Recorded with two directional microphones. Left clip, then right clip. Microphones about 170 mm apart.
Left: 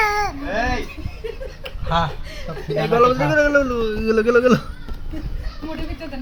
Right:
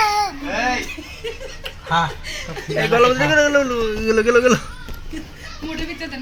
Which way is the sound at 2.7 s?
5° left (ahead or behind).